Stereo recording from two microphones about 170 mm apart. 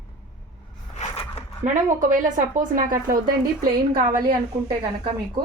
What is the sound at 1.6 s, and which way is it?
A woman's voice, 50° right (ahead or behind).